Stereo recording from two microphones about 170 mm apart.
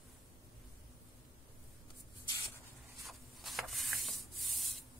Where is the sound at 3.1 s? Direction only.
Centre (ahead or behind).